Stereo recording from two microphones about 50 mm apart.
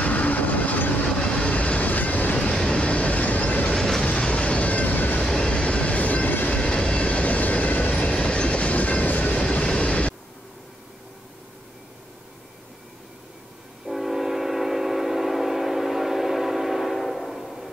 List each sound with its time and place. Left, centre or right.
0.0 s vehicle: left
1.2 s train: left
2.5 s train: centre; by 3.7 s left
3.7 s train: centre
4.0 s train: left
5.2 s train: centre; by 6.6 s left
6.6 s train: centre; by 8.0 s left
8.0 s train: left
13.8 s train: centre